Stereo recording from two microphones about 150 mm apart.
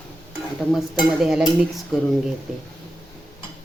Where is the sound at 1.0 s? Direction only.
Centre (ahead or behind).